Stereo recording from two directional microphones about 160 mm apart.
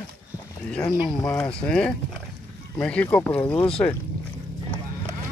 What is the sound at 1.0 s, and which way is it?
Speech, 10° left (ahead or behind).